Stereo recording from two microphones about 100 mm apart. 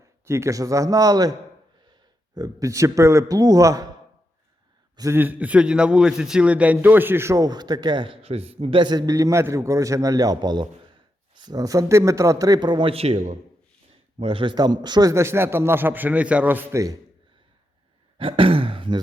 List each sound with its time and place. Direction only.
0.3 s a man's voice: 30° right (ahead or behind)
5.1 s a man's voice: 15° right (ahead or behind)
7.4 s a man's voice: 45° right (ahead or behind); by 8.8 s 85° right
8.8 s a man's voice: 45° right (ahead or behind)
12.9 s a man's voice: 85° right
14.2 s a man's voice: 60° right (ahead or behind)
15.1 s a man's voice: 25° right (ahead or behind)
18.2 s a man's voice: 65° right (ahead or behind)